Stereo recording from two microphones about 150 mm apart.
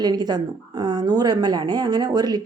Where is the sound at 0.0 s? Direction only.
25° right (ahead or behind).